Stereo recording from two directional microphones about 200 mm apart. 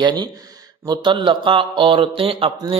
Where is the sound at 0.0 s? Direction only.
20° right (ahead or behind).